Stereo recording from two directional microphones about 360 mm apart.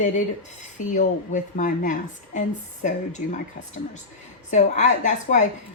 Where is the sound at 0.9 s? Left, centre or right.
Left.